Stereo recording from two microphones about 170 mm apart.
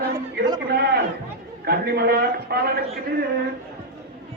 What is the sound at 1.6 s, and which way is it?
A man's voice, 70° right (ahead or behind).